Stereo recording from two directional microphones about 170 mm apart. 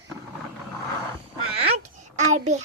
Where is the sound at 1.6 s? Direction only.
45° right (ahead or behind).